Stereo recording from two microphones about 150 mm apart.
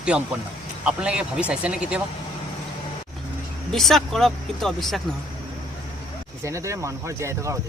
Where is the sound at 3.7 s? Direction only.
Centre (ahead or behind).